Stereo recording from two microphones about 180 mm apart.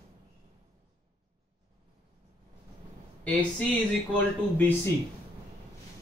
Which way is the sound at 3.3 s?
10° left (ahead or behind).